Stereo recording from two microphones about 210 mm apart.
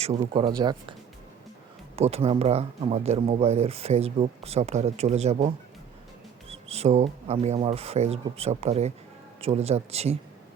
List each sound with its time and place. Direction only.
0.0 s speech: 30° right (ahead or behind)
0.4 s speech: 20° right (ahead or behind)
2.0 s speech: 30° right (ahead or behind)
6.5 s speech: 30° right (ahead or behind)